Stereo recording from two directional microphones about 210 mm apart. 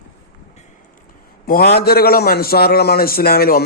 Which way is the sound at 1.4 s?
45° left (ahead or behind).